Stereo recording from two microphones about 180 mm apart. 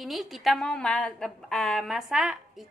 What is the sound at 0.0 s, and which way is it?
A woman's voice, centre (ahead or behind).